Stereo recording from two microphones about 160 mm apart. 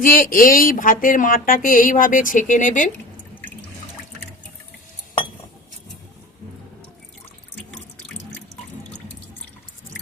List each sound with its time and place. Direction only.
0.0 s speech: 60° left (ahead or behind)
7.7 s drip: 10° left (ahead or behind)